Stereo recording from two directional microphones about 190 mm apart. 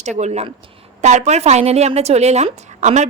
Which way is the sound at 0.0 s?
35° right (ahead or behind).